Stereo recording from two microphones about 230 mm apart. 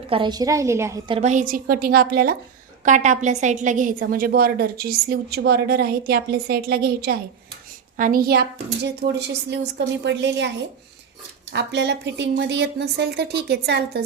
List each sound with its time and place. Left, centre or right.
0.1 s a woman's voice: centre; by 10.5 s right
11.5 s a woman's voice: right